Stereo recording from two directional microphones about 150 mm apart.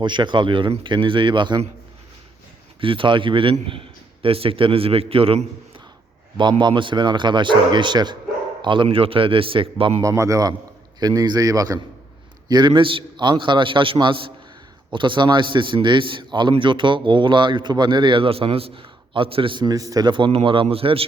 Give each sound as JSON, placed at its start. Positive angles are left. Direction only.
{"t": 0.0, "sound": "a man's voice", "side_deg": -30}
{"t": 2.8, "sound": "a man's voice", "side_deg": -35}
{"t": 10.0, "sound": "a man's voice", "side_deg": -20}